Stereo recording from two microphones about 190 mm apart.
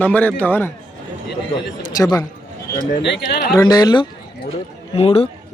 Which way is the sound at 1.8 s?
20° left (ahead or behind).